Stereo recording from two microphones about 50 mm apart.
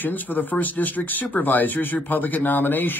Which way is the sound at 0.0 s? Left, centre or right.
Left.